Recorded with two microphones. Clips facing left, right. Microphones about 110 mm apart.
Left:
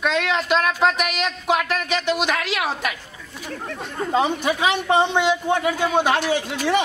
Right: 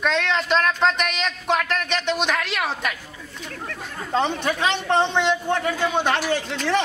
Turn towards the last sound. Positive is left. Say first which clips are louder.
# left 2 dB
turn(degrees=10)  # may be behind; listen again after turning